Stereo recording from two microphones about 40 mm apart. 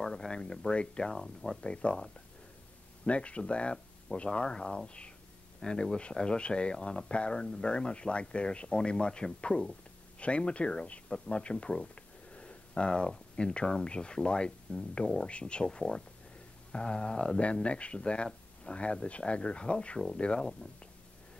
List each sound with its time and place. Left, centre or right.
0.0 s a sound: centre
0.3 s speech: left
3.1 s speech: left